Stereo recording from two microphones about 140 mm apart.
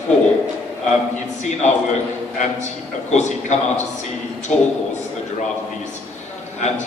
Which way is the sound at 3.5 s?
60° left (ahead or behind).